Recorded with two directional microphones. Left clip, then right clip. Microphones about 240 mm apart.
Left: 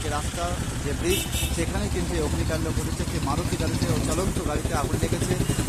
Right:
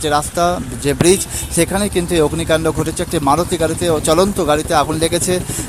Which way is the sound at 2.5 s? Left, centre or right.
Right.